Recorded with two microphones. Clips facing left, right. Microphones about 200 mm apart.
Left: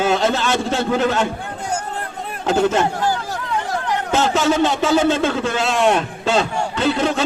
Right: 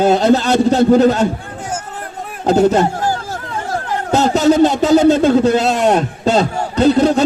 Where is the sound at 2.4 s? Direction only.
40° right (ahead or behind).